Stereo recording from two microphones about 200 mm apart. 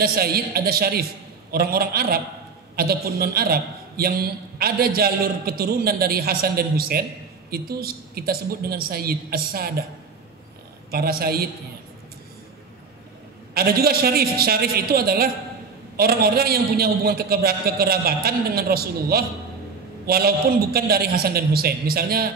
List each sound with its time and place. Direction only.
0.0 s a man's voice: 50° right (ahead or behind)
10.9 s a man's voice: 50° right (ahead or behind)
13.6 s a man's voice: 50° right (ahead or behind)